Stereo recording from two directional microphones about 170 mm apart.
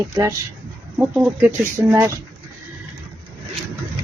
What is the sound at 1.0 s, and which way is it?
Speech, 10° right (ahead or behind).